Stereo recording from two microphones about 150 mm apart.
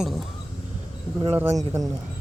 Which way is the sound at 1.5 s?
25° right (ahead or behind).